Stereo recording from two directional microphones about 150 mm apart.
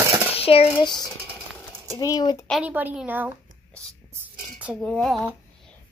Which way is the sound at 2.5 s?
10° right (ahead or behind).